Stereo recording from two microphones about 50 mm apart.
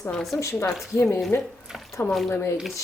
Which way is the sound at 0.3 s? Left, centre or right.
Left.